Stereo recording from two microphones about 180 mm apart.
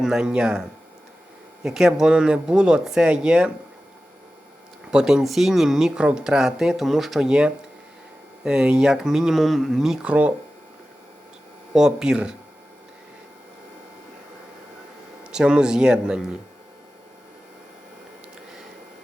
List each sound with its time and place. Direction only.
0.0 s speech: 5° right (ahead or behind)
1.6 s speech: 5° right (ahead or behind)
4.9 s speech: 5° right (ahead or behind)
11.7 s speech: 5° right (ahead or behind)
15.2 s speech: 5° right (ahead or behind)